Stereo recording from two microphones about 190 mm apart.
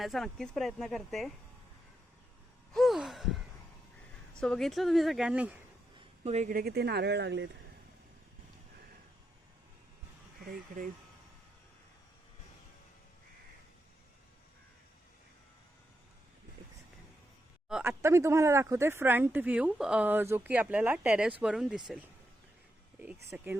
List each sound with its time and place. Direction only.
0.0 s speech: centre (ahead or behind)
2.7 s a sound: centre (ahead or behind)
4.4 s speech: 5° left (ahead or behind)
6.2 s speech: 40° right (ahead or behind); by 7.5 s 65° right (ahead or behind)
10.5 s speech: 45° right (ahead or behind)
17.7 s speech: 10° right (ahead or behind)